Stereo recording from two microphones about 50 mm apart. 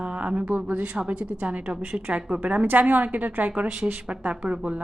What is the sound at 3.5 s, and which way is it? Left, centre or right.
Speech, centre.